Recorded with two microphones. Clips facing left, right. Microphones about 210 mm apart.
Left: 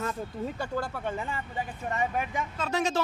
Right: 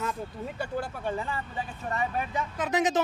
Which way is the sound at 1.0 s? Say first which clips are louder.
Right 1 dB; 20° left (ahead or behind).